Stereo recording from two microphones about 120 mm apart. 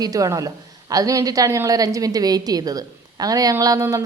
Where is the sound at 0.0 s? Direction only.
30° right (ahead or behind).